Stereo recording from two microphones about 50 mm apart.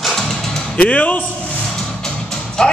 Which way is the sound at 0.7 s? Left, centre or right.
Left.